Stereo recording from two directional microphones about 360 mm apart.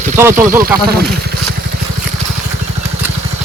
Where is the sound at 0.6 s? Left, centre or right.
Right.